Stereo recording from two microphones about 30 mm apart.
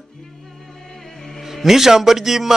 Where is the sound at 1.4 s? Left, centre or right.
Centre.